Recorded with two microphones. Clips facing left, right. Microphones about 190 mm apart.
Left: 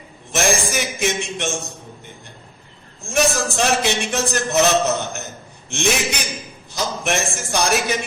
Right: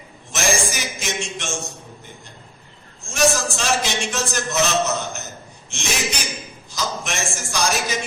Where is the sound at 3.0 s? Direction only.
60° left (ahead or behind).